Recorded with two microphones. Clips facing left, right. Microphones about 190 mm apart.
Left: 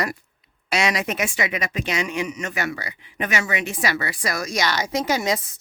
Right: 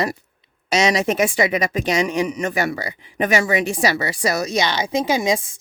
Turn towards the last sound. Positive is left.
turn(degrees=-15)  # may be behind; listen again after turning